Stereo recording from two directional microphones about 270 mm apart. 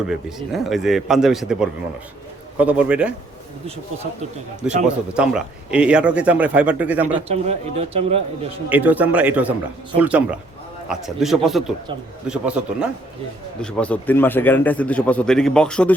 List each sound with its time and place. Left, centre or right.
0.1 s a man's voice: centre
4.9 s a man's voice: centre
7.3 s speech: right
8.7 s a man's voice: centre